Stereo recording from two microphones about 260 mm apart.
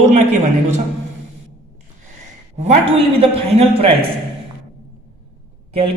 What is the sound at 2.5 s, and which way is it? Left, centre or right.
Speech, right.